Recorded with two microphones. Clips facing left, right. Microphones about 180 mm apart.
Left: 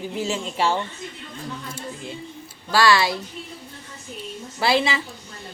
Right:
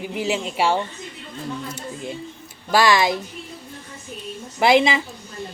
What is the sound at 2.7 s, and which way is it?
Speech, 15° right (ahead or behind).